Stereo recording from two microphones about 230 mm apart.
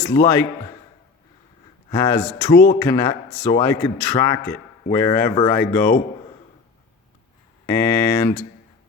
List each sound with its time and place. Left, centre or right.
0.1 s a man's voice: centre
1.9 s a man's voice: centre
2.5 s speech: left
2.7 s a man's voice: centre
7.7 s a man's voice: centre